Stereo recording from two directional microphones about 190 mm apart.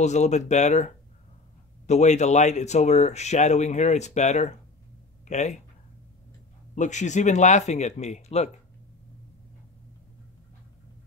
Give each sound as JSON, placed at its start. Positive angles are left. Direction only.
{"t": 0.0, "sound": "speech", "side_deg": 35}
{"t": 6.7, "sound": "speech", "side_deg": 40}